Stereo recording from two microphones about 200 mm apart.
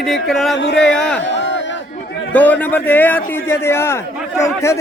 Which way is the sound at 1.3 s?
65° left (ahead or behind).